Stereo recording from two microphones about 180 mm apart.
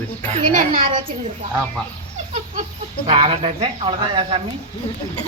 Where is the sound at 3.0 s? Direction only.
35° right (ahead or behind).